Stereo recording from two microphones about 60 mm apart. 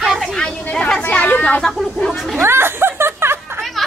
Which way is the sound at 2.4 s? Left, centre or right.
Right.